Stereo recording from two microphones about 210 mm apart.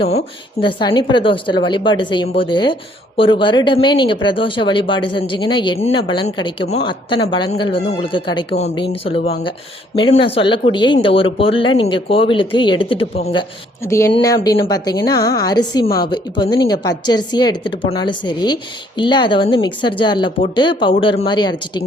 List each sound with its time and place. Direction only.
0.6 s speech: 20° left (ahead or behind)
13.8 s a woman's voice: 15° left (ahead or behind)